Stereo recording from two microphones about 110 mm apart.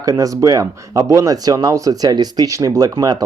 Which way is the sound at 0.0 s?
30° right (ahead or behind).